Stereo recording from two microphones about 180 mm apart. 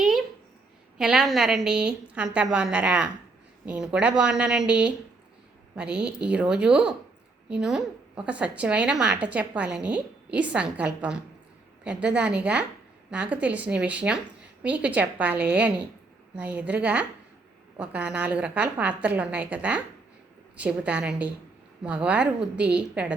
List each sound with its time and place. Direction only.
0.9 s a woman's voice: 5° right (ahead or behind)